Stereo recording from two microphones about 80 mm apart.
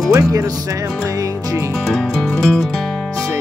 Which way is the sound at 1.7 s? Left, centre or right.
Centre.